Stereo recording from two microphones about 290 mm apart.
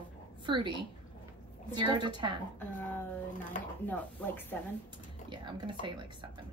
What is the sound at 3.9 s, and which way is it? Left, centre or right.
Speech, centre.